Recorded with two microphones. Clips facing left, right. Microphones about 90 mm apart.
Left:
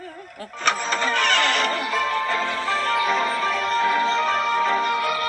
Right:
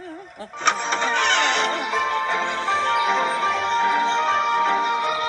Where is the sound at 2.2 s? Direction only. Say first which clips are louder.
Right 1 dB; 30° right (ahead or behind).